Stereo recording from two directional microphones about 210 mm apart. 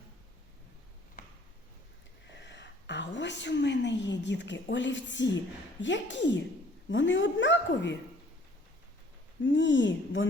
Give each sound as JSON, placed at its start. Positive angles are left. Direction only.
{"t": 2.3, "sound": "a sound", "side_deg": 55}
{"t": 5.8, "sound": "a woman's voice", "side_deg": 60}
{"t": 9.4, "sound": "a woman's voice", "side_deg": 60}